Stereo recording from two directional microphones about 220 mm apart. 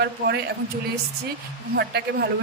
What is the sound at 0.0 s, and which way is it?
Speech, 45° right (ahead or behind).